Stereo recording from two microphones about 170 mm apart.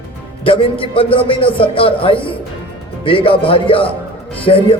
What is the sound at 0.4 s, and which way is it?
A man's voice, 30° left (ahead or behind).